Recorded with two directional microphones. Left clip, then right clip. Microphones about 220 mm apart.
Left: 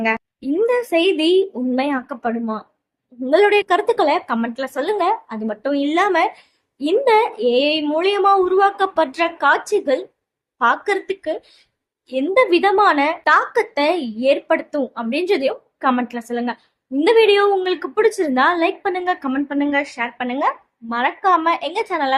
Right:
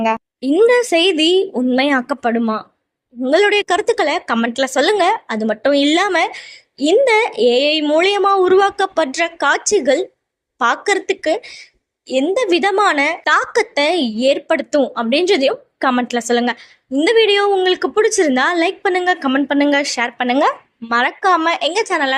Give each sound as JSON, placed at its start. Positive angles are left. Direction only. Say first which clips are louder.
{"t": 0.4, "sound": "a woman's voice", "louder": "right 6 dB", "side_deg": -20}